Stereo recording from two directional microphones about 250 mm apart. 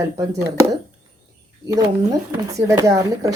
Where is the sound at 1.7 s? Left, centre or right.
Centre.